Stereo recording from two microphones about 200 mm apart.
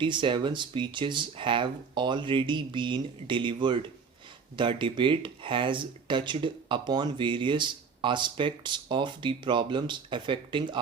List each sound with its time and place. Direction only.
0.0 s speech: 25° right (ahead or behind)